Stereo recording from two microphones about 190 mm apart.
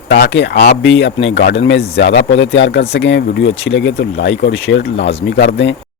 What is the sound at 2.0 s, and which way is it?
Speech, 75° left (ahead or behind).